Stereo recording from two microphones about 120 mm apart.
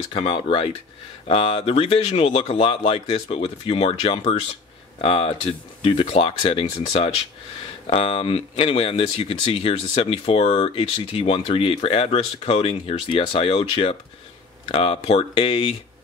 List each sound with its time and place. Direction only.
0.4 s speech: 50° left (ahead or behind)
5.0 s speech: 50° left (ahead or behind)
7.8 s speech: 50° left (ahead or behind)